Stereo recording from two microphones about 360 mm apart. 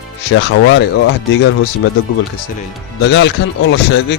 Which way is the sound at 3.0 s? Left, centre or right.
Left.